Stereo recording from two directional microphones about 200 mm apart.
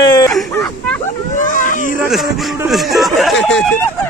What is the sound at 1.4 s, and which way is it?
Baby cry, 40° left (ahead or behind).